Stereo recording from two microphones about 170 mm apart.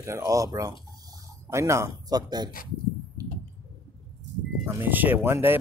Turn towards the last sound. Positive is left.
turn(degrees=-15)  # may be behind; listen again after turning